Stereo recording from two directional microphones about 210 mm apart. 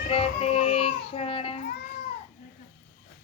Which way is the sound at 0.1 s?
25° left (ahead or behind).